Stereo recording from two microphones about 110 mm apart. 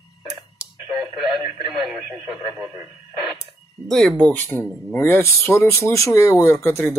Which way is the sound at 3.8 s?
5° left (ahead or behind).